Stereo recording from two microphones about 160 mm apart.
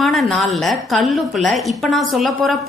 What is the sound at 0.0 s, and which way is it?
A woman's voice, centre (ahead or behind).